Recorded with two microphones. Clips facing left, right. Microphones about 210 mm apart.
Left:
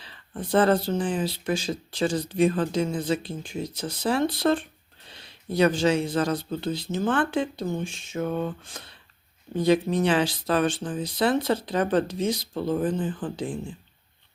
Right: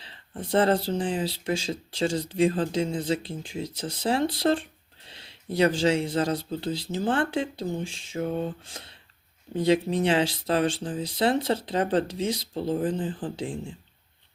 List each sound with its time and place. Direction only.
0.0 s speech: 25° right (ahead or behind)